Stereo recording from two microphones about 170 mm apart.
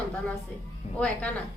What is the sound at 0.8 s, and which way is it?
Speech, 40° left (ahead or behind).